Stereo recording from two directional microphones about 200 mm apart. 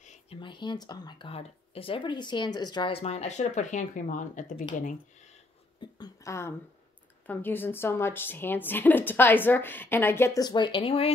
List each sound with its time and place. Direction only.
0.0 s a sound: 35° left (ahead or behind)
0.4 s speech: 25° left (ahead or behind); by 4.6 s 40° left (ahead or behind)
5.8 s a woman's voice: 20° left (ahead or behind)